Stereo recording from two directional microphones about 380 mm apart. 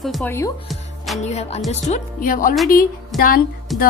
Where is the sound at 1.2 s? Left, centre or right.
Centre.